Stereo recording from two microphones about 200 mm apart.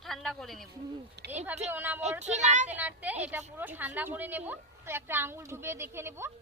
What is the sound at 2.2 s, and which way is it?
Speech, 35° right (ahead or behind).